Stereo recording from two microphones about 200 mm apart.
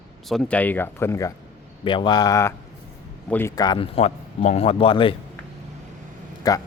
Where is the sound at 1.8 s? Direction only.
25° left (ahead or behind).